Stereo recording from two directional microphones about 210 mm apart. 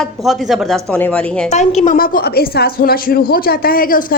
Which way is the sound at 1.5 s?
30° left (ahead or behind).